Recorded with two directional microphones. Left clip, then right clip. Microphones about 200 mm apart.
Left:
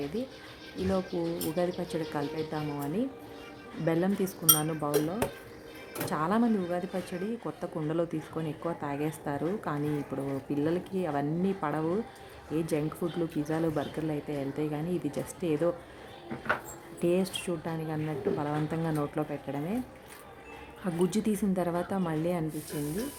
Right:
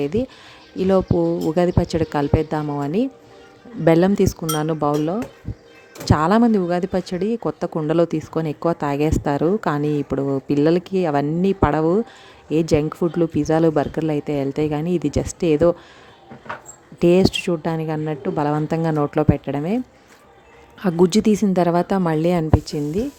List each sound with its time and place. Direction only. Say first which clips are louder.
1.5 s speech: right 10 dB; 45° right (ahead or behind)
17.0 s speech: right 13 dB; 45° right (ahead or behind)
20.8 s speech: right 13 dB; 45° right (ahead or behind)